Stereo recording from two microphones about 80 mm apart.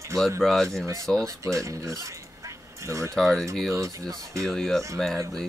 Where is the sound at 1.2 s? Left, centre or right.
Right.